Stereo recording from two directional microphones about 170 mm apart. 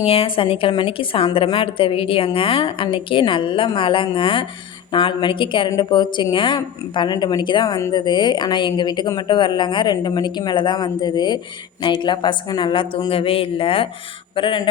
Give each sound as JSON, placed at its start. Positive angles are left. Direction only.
{"t": 0.0, "sound": "a woman's voice", "side_deg": 35}